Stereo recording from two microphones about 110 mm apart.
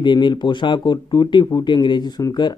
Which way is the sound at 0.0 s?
45° left (ahead or behind).